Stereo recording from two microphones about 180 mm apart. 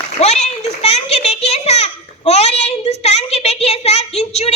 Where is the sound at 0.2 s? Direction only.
35° left (ahead or behind).